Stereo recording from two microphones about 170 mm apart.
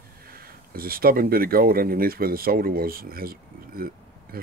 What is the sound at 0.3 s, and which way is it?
Speech, 60° right (ahead or behind).